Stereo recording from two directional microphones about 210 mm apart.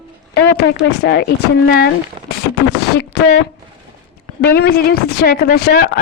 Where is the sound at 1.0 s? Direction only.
50° left (ahead or behind).